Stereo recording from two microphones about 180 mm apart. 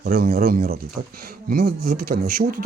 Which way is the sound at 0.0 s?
55° right (ahead or behind).